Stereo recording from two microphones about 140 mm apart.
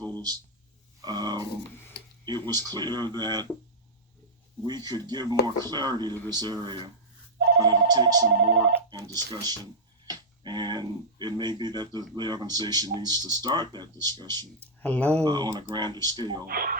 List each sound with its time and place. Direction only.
0.0 s a sound: 30° right (ahead or behind)
1.0 s speech: 30° right (ahead or behind)
4.6 s speech: 30° right (ahead or behind)
14.8 s speech: 10° left (ahead or behind)
15.2 s speech: 30° right (ahead or behind)
16.5 s speech: 90° right